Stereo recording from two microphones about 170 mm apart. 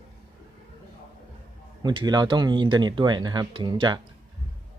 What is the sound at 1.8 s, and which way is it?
Speech, 25° right (ahead or behind).